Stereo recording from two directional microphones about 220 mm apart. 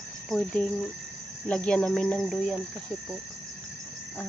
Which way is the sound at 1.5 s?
5° left (ahead or behind).